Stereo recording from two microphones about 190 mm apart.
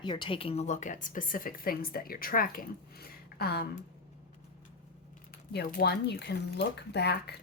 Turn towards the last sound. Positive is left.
turn(degrees=60)  # may be behind; listen again after turning